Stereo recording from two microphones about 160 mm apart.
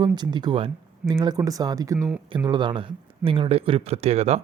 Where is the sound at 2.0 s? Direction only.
5° right (ahead or behind).